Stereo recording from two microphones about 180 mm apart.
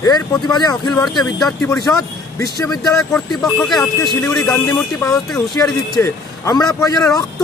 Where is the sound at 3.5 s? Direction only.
Centre (ahead or behind).